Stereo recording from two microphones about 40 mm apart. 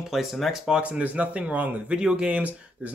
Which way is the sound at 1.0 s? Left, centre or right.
Right.